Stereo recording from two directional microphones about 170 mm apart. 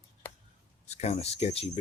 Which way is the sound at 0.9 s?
40° left (ahead or behind).